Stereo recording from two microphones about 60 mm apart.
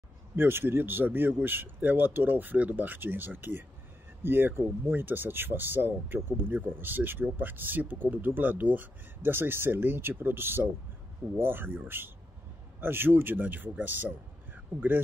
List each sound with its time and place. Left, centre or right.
0.4 s speech: right